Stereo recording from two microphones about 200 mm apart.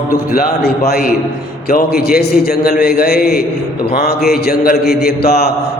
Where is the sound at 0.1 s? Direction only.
45° left (ahead or behind).